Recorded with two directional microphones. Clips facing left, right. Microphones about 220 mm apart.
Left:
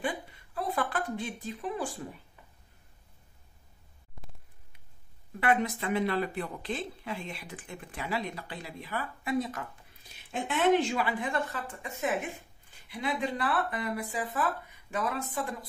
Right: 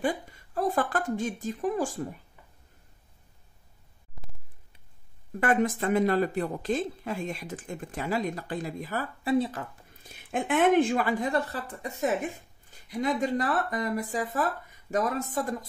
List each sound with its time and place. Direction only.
0.0 s a sound: 45° right (ahead or behind)
5.4 s speech: 45° right (ahead or behind); by 9.7 s 30° right (ahead or behind)
10.0 s speech: 50° right (ahead or behind)